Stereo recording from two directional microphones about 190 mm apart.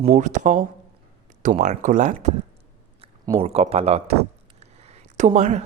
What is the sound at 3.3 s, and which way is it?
A man's voice, 30° right (ahead or behind).